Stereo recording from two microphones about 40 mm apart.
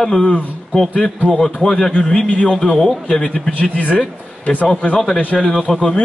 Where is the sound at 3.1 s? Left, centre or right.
Left.